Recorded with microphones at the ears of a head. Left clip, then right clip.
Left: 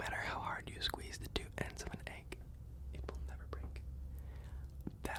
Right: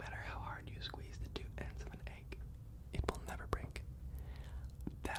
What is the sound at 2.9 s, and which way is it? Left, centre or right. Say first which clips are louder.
Whispering: right 9 dB; right.